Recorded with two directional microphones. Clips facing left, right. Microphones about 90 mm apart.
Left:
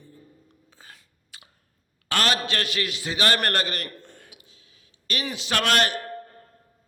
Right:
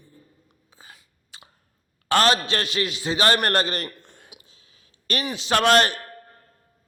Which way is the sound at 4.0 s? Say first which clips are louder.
Left 2 dB; 20° right (ahead or behind).